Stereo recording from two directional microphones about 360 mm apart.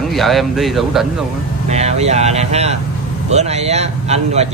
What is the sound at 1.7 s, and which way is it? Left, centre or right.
Speech, centre.